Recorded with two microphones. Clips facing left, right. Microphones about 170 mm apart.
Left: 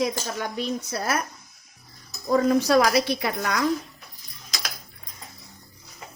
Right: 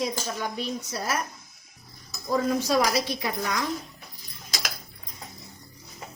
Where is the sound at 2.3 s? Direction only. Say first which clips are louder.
Left 5 dB; 65° left (ahead or behind).